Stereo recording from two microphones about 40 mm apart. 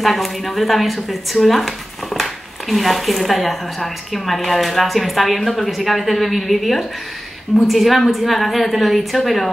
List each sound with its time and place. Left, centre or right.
0.0 s a woman's voice: centre
2.7 s a woman's voice: centre